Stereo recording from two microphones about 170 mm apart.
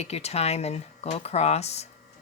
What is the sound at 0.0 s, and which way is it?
Speech, 40° left (ahead or behind).